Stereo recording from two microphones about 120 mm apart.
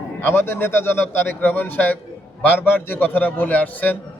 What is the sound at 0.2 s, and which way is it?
A man's voice, 20° left (ahead or behind).